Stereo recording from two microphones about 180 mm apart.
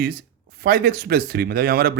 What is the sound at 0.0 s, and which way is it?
Speech, 55° right (ahead or behind).